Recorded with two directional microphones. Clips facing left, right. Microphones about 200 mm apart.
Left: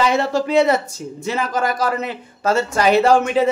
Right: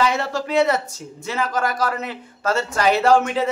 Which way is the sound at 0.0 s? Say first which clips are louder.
Left 4 dB; 20° left (ahead or behind).